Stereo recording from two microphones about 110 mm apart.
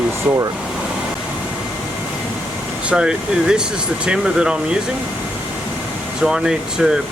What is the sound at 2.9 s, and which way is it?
Speech, 10° right (ahead or behind).